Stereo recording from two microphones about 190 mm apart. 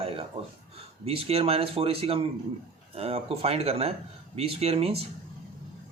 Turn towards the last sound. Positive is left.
turn(degrees=-30)  # may be behind; listen again after turning